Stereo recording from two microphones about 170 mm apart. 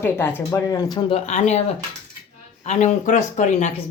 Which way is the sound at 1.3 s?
40° left (ahead or behind).